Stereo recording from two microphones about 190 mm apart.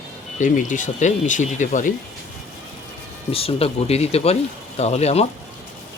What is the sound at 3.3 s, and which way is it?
Speech, 30° left (ahead or behind).